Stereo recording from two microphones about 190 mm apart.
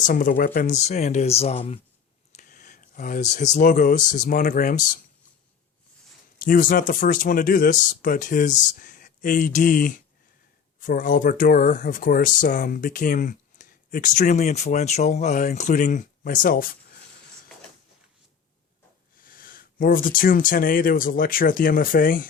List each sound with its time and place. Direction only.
0.0 s speech: 45° left (ahead or behind)
2.3 s speech: 40° left (ahead or behind)
6.4 s speech: 45° left (ahead or behind)
19.1 s speech: 50° left (ahead or behind)